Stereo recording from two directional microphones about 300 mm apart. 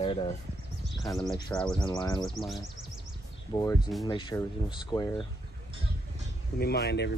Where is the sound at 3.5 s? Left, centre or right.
Centre.